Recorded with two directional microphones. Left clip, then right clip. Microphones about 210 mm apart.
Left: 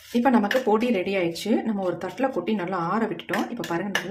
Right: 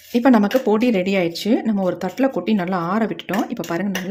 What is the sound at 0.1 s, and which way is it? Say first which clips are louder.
Speech: right 5 dB; 35° right (ahead or behind).